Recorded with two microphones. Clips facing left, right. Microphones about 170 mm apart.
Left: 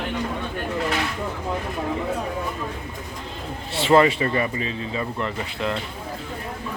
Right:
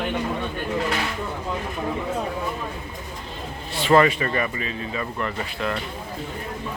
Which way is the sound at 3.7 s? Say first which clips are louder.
Left 1 dB; 25° left (ahead or behind).